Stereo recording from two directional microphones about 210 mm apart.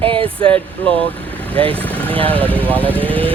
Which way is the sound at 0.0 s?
25° right (ahead or behind).